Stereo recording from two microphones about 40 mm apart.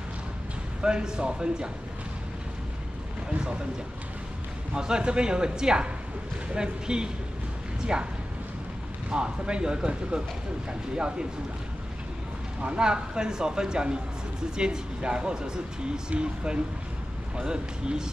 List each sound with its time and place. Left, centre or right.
0.8 s speech: right
3.3 s speech: right
4.7 s speech: centre
9.1 s speech: right
12.7 s speech: right